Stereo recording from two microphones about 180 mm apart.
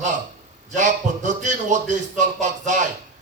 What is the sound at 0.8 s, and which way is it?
A man's voice, 45° right (ahead or behind).